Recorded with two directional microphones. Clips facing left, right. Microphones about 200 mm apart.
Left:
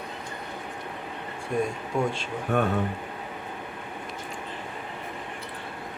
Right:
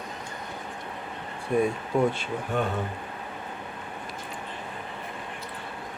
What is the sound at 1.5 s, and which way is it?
Speech, 5° right (ahead or behind).